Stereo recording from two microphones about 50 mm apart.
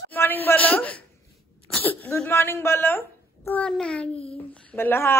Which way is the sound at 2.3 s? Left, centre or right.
Left.